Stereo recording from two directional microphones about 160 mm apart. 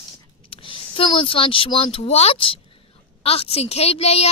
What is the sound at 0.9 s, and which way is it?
Speech, 30° left (ahead or behind).